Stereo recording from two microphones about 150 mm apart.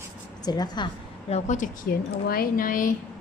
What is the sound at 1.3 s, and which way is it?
Speech, 55° left (ahead or behind).